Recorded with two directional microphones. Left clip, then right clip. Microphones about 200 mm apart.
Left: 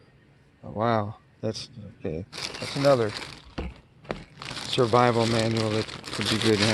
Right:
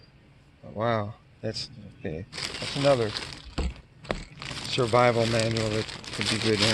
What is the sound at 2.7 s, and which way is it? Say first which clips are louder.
Speech: left 2 dB; 40° left (ahead or behind).